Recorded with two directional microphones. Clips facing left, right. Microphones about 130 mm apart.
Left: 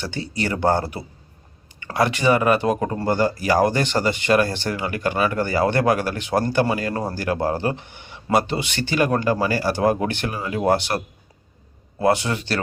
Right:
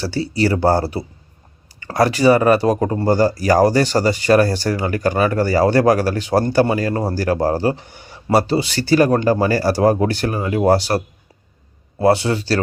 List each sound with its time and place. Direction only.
0.0 s speech: 35° right (ahead or behind)